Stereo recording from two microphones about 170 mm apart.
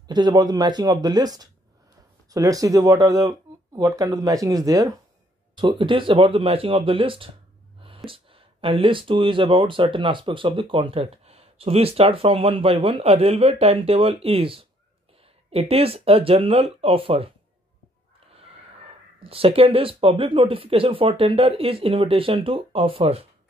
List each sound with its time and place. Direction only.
0.1 s speech: 25° right (ahead or behind)
19.1 s speech: 35° right (ahead or behind)